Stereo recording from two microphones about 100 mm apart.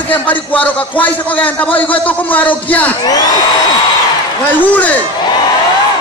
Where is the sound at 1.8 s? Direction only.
15° left (ahead or behind).